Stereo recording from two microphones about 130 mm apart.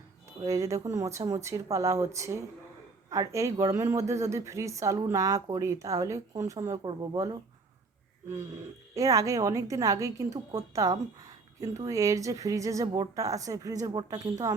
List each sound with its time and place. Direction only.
0.4 s a woman's voice: 25° right (ahead or behind)
9.0 s a woman's voice: 25° right (ahead or behind)